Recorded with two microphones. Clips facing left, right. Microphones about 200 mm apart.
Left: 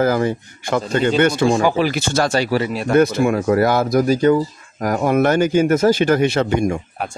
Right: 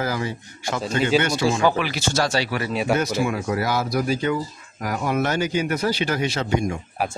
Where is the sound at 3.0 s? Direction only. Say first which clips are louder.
Left 8 dB; 55° left (ahead or behind).